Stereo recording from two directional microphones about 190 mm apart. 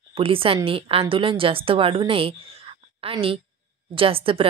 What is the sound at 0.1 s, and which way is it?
A woman's voice, 30° right (ahead or behind).